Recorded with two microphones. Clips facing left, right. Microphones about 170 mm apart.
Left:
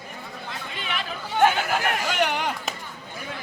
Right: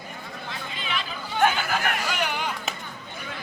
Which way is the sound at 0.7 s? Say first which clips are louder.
Left 1 dB; 65° left (ahead or behind).